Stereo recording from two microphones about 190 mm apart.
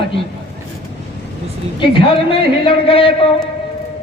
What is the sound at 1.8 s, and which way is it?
A man's voice, 25° left (ahead or behind).